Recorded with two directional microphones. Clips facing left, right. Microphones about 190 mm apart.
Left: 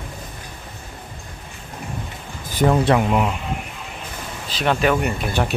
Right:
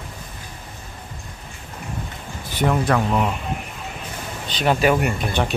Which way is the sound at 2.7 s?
30° left (ahead or behind).